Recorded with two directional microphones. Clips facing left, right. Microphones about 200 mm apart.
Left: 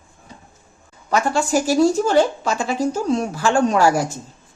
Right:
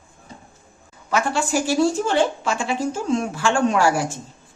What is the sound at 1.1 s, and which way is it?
A woman's voice, 40° left (ahead or behind).